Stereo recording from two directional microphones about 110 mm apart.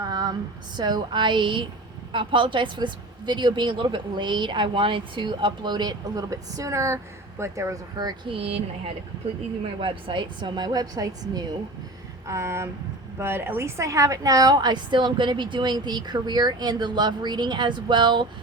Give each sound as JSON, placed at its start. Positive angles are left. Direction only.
{"t": 0.0, "sound": "a sound", "side_deg": -40}
{"t": 0.8, "sound": "speech", "side_deg": -40}
{"t": 8.3, "sound": "speech", "side_deg": -60}
{"t": 9.8, "sound": "a woman's voice", "side_deg": -50}
{"t": 12.3, "sound": "a woman's voice", "side_deg": -25}